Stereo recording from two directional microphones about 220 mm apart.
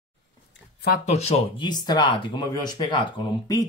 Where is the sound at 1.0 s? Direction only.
30° left (ahead or behind).